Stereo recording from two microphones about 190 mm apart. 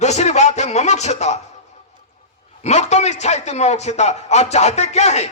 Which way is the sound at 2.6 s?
35° left (ahead or behind).